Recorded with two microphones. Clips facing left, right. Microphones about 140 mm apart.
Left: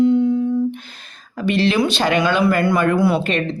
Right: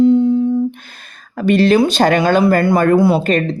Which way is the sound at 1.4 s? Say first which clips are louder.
Right 6 dB; 45° right (ahead or behind).